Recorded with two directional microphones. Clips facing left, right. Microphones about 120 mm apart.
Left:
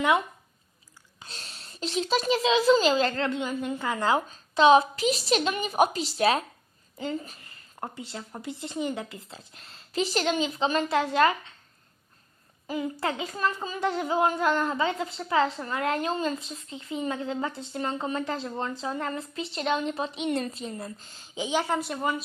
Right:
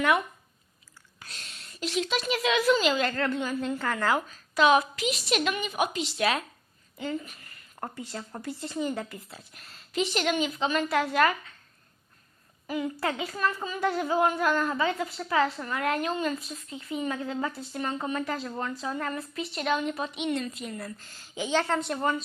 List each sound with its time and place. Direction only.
1.2 s a child's voice: 30° left (ahead or behind)
7.8 s speech: 15° left (ahead or behind)
12.6 s a woman's voice: 25° left (ahead or behind); by 22.2 s 5° left (ahead or behind)